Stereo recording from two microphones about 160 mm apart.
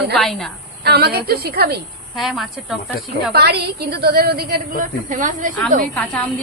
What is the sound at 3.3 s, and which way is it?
A woman's voice, 80° right.